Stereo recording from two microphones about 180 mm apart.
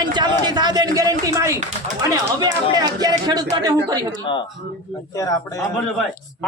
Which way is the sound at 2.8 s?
20° right (ahead or behind).